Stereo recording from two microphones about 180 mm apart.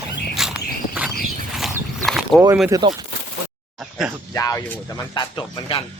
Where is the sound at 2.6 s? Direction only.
20° right (ahead or behind).